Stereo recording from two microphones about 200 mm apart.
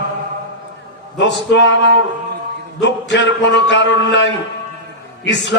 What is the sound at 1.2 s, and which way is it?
A man's voice, 60° left (ahead or behind).